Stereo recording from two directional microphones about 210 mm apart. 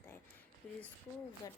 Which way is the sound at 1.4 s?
15° left (ahead or behind).